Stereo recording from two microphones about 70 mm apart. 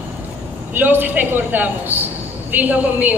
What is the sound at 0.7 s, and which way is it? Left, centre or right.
A man's voice, right.